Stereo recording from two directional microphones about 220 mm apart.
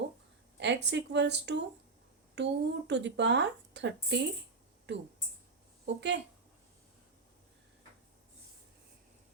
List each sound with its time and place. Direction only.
0.6 s speech: 50° right (ahead or behind)